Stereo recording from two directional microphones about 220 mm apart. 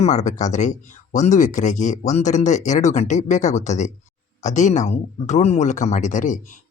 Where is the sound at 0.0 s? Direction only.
30° left (ahead or behind).